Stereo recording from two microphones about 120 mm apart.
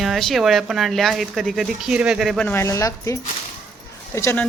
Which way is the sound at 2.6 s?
30° left (ahead or behind).